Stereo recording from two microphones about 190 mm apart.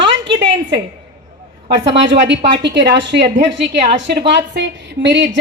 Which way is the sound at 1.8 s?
70° right (ahead or behind).